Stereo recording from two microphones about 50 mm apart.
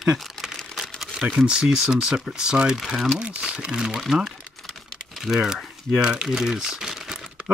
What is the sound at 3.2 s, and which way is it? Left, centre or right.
Speech, right.